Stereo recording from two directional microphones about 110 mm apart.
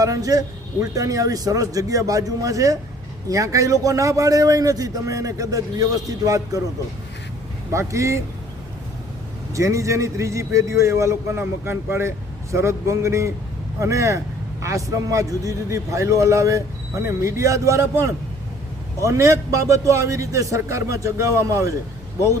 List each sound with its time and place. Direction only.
0.0 s a man's voice: 30° right (ahead or behind)
7.7 s a man's voice: 30° right (ahead or behind)
9.6 s a man's voice: 30° right (ahead or behind)